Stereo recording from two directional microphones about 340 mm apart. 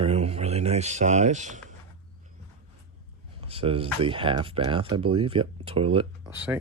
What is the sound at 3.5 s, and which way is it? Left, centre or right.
Speech, centre.